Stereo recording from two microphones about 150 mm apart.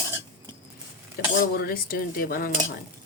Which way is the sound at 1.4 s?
80° left.